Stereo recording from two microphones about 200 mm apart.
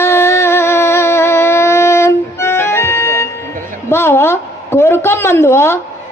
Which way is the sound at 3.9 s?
10° left (ahead or behind).